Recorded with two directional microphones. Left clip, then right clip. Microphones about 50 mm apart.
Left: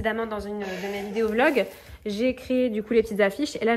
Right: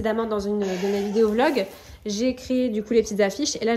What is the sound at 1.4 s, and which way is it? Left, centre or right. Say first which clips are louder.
Speech: left 1 dB; right.